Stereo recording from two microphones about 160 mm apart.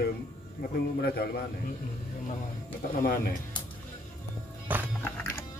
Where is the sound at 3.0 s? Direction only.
70° left (ahead or behind).